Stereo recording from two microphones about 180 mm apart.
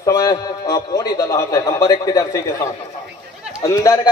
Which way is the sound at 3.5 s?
15° left (ahead or behind).